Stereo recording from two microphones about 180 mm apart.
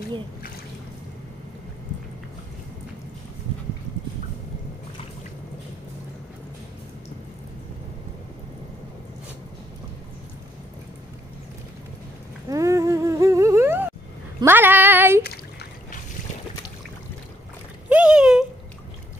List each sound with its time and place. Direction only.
12.4 s humming: 15° right (ahead or behind)
14.4 s child singing: 10° right (ahead or behind)
17.8 s a sound: 5° right (ahead or behind)